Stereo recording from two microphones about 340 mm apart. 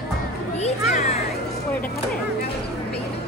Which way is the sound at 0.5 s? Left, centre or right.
Centre.